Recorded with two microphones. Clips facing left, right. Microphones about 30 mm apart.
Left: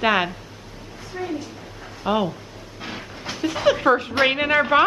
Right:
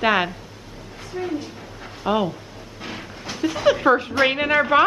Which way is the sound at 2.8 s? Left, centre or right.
Centre.